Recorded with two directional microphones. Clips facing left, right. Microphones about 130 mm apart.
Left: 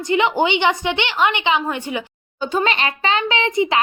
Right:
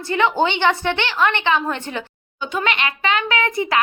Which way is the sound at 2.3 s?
35° left (ahead or behind).